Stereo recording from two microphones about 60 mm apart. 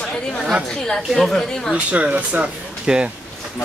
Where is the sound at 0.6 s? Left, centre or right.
Centre.